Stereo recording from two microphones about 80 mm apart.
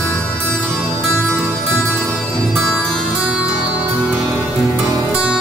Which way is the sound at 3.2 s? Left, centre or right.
Centre.